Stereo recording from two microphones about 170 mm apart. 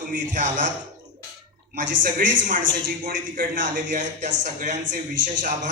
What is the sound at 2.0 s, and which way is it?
A man's voice, 55° right (ahead or behind).